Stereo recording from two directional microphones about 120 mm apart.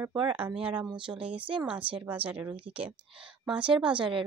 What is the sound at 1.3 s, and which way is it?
Speech, 45° right (ahead or behind).